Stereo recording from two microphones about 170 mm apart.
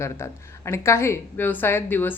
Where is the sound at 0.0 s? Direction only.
15° left (ahead or behind).